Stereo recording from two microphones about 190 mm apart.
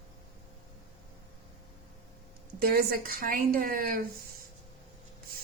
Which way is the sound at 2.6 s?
55° right (ahead or behind).